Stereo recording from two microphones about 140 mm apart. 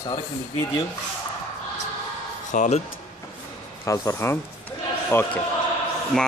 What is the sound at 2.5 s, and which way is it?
Speech, 65° left (ahead or behind).